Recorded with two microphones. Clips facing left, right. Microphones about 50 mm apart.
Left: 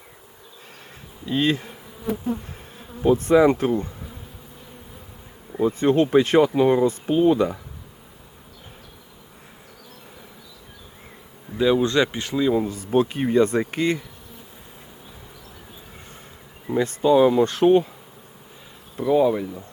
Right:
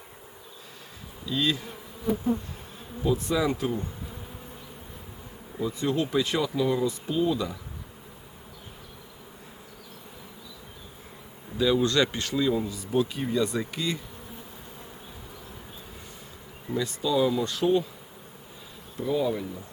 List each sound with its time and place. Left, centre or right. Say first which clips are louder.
1.2 s speech: left 6 dB; left
2.1 s bee: left 1 dB; left
3.0 s speech: left 10 dB; left
5.5 s speech: left 9 dB; left
11.5 s speech: left 4 dB; left
12.6 s speech: left 6 dB; left
16.6 s speech: left 9 dB; left
18.9 s speech: left 8 dB; left